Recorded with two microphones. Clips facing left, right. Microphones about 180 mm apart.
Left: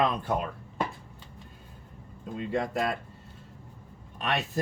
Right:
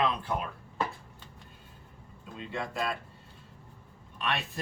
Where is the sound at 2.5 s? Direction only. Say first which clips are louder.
Left 6 dB; 50° left (ahead or behind).